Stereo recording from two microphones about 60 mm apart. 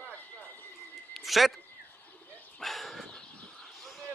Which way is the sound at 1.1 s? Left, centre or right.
Centre.